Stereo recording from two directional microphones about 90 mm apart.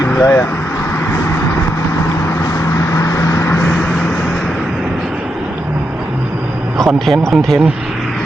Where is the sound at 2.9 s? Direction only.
30° left (ahead or behind).